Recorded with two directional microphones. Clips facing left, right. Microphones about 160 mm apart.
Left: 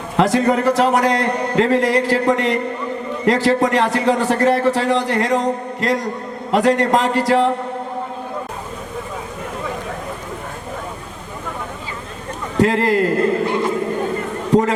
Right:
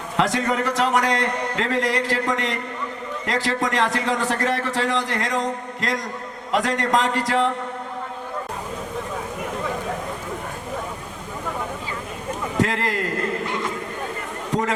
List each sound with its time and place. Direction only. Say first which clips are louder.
0.2 s a man's voice: left 6 dB; 35° left (ahead or behind)
12.6 s a sound: left 9 dB; 30° left (ahead or behind)
14.5 s a man's voice: left 9 dB; 30° left (ahead or behind)